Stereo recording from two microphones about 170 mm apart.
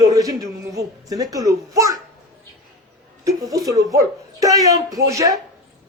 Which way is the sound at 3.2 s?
20° right (ahead or behind).